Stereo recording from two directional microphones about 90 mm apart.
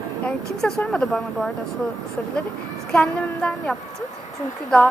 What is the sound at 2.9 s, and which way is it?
Speech, 15° left (ahead or behind).